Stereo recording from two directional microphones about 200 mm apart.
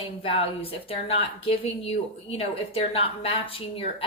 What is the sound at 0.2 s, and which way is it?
A woman's voice, 30° left (ahead or behind).